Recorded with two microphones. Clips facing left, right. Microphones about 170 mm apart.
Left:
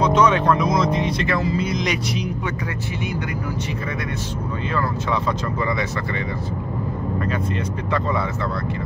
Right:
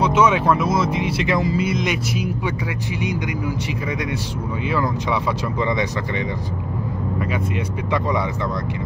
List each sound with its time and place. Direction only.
0.0 s speech: 10° right (ahead or behind)
4.6 s speech: 10° right (ahead or behind)